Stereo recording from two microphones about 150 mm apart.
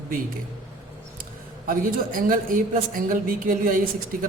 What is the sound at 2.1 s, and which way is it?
A woman's voice, 65° right (ahead or behind).